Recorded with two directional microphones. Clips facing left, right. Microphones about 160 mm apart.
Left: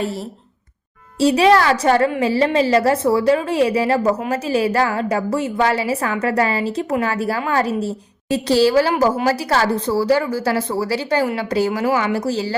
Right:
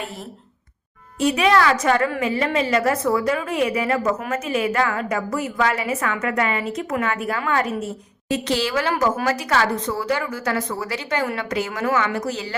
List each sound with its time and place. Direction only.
1.2 s a woman's voice: 30° left (ahead or behind)